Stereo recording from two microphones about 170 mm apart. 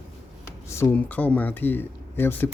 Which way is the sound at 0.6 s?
15° left (ahead or behind).